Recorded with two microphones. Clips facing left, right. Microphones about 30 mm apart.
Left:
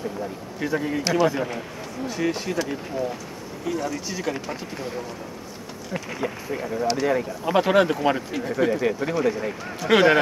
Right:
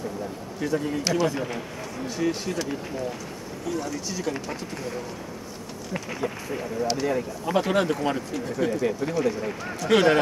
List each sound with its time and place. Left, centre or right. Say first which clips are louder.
0.6 s speech: left 1 dB; centre
6.2 s speech: left 2 dB; centre